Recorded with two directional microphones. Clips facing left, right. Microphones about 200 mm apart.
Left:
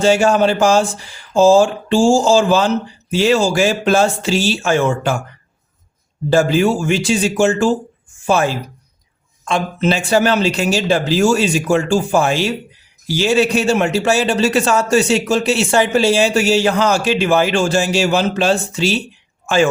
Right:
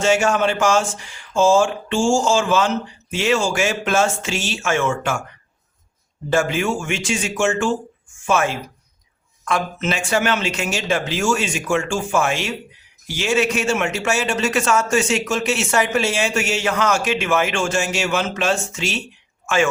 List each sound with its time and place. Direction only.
0.0 s a man's voice: 35° left (ahead or behind)
6.3 s a man's voice: 35° left (ahead or behind)